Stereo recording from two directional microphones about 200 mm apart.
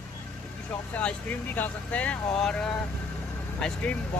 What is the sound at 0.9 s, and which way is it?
Speech, 5° left (ahead or behind).